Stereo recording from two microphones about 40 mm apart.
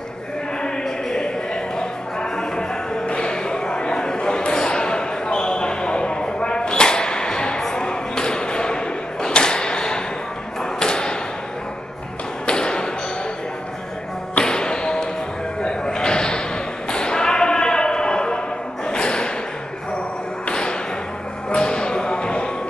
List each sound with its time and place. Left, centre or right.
0.6 s a sound: centre
10.6 s thump: centre
12.4 s tap: left
14.4 s music: centre
15.6 s a sound: centre
16.9 s basketball bounce: left
18.9 s a sound: left
20.4 s thump: left
21.5 s whip: left